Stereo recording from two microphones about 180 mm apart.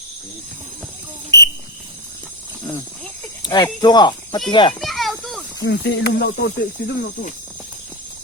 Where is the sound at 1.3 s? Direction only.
15° left (ahead or behind).